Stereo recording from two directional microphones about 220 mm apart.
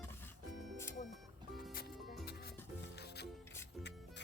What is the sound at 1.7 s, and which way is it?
Music, 40° left (ahead or behind).